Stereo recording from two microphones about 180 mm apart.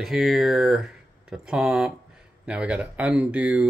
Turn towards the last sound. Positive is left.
turn(degrees=-10)  # may be behind; listen again after turning